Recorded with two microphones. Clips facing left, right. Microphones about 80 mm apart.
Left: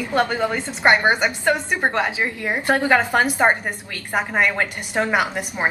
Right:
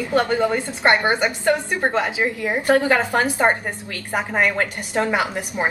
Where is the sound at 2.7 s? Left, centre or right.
Left.